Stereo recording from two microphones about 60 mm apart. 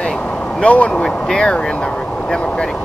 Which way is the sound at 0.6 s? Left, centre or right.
Left.